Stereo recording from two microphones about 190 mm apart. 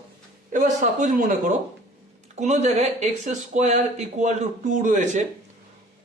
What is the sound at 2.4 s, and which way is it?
Speech, 40° right (ahead or behind).